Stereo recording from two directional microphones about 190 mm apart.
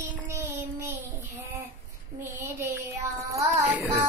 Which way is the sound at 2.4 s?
15° right (ahead or behind).